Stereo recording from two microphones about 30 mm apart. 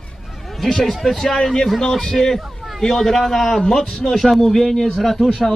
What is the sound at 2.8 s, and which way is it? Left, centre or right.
Speech, centre.